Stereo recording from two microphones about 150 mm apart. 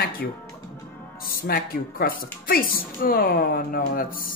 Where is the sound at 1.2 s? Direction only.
75° left (ahead or behind).